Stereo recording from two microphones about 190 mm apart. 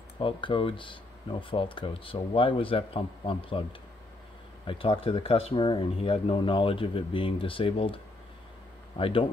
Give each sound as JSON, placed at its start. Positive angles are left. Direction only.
{"t": 0.2, "sound": "speech", "side_deg": 25}
{"t": 4.6, "sound": "speech", "side_deg": 25}